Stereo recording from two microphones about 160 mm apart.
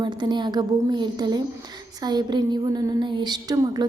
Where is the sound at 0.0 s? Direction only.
30° right (ahead or behind).